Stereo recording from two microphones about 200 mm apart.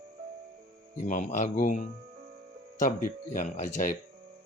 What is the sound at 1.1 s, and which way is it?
Speech, 40° left (ahead or behind).